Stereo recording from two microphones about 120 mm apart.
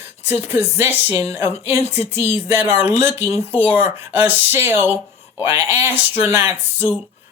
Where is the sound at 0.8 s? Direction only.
15° right (ahead or behind).